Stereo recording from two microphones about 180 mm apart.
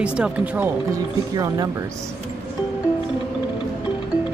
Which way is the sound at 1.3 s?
20° right (ahead or behind).